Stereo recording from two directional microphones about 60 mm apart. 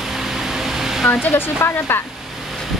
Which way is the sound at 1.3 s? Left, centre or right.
Left.